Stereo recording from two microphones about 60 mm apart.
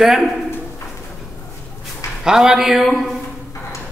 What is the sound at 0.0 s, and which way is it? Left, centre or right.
Speech, centre.